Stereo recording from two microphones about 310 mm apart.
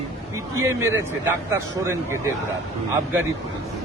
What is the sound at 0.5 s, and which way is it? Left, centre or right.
A man's voice, centre.